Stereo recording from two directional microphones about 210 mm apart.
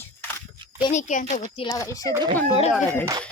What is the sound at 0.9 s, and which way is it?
Speech, 35° left (ahead or behind).